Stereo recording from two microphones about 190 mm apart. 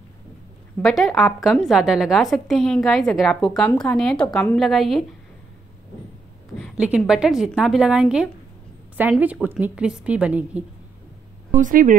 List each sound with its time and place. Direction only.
0.8 s a woman's voice: centre (ahead or behind)
6.6 s a woman's voice: 5° right (ahead or behind)
11.5 s speech: 45° right (ahead or behind)